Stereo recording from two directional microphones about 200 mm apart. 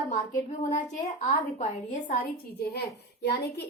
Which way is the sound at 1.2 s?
30° left (ahead or behind).